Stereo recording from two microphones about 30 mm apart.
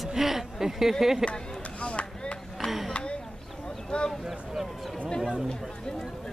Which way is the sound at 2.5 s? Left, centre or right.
Centre.